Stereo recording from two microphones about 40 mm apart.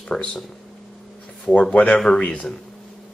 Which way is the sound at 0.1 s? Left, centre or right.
Centre.